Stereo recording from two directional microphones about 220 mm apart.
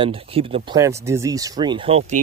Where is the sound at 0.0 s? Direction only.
25° right (ahead or behind).